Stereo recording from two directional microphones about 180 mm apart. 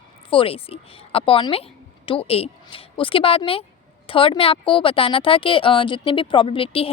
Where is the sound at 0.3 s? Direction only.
30° left (ahead or behind).